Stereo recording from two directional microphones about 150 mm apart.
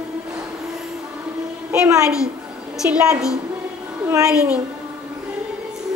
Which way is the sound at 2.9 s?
5° right (ahead or behind).